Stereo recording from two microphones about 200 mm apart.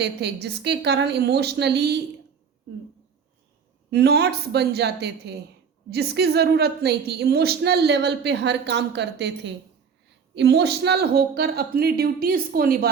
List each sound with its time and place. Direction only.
0.4 s a woman's voice: 60° right (ahead or behind)
3.9 s a woman's voice: 55° right (ahead or behind)